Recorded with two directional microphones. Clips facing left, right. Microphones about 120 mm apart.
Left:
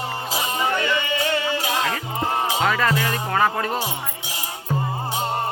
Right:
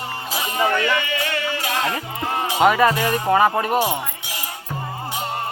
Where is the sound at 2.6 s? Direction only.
20° right (ahead or behind).